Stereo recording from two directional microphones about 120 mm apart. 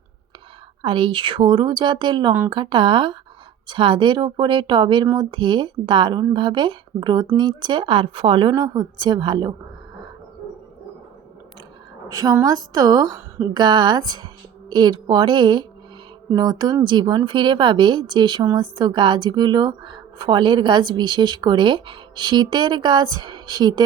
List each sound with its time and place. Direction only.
0.8 s speech: 45° right (ahead or behind)
12.0 s speech: 30° right (ahead or behind)